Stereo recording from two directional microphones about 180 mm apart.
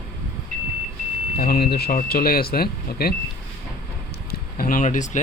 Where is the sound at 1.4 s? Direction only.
55° left (ahead or behind).